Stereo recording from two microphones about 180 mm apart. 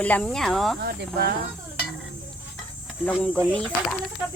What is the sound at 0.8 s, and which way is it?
Speech, 60° right (ahead or behind).